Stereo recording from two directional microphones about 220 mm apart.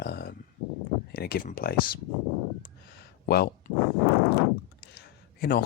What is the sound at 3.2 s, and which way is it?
Speech, 45° left (ahead or behind).